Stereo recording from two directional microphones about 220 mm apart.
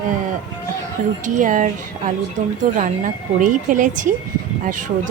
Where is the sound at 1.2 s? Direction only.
35° right (ahead or behind).